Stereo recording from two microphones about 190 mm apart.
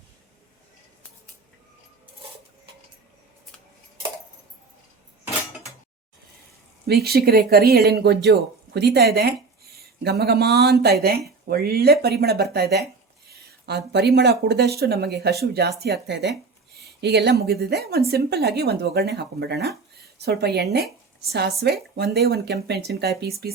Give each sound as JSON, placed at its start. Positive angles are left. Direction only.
{"t": 6.8, "sound": "speech", "side_deg": -55}